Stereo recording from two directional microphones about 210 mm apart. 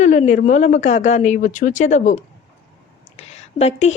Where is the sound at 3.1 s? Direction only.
30° left (ahead or behind).